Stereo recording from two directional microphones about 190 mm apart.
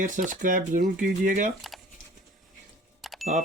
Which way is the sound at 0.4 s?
45° right (ahead or behind).